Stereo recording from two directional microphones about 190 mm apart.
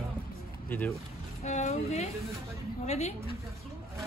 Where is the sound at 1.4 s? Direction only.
40° left (ahead or behind).